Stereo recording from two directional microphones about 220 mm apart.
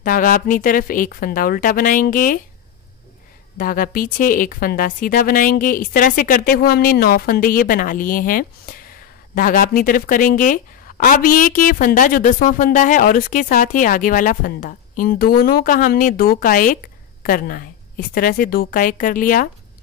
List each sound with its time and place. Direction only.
0.0 s a woman's voice: 40° left (ahead or behind)
3.5 s a woman's voice: 40° left (ahead or behind)